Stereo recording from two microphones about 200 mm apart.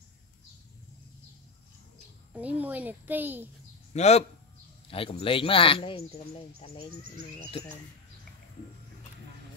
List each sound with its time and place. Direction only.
2.3 s a child's voice: 5° right (ahead or behind)
3.9 s speech: 35° left (ahead or behind)